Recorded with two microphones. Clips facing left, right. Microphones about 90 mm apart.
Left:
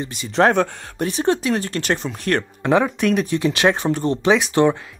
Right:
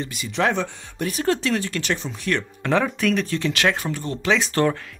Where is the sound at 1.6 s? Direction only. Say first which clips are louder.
Left 3 dB; 40° left (ahead or behind).